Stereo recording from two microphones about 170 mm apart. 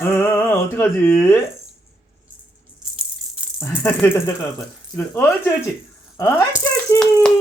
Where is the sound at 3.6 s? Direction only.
15° left (ahead or behind).